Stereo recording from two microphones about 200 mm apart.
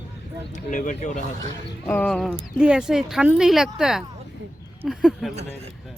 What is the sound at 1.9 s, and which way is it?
Speech, 5° left (ahead or behind).